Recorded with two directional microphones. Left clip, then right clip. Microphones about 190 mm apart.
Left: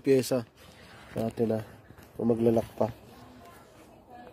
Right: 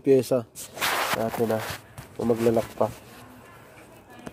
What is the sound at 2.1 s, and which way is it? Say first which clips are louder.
Speech: right 3 dB; 15° left (ahead or behind).